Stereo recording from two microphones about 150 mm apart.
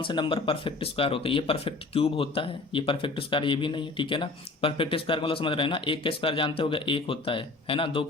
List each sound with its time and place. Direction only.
0.0 s speech: 35° left (ahead or behind)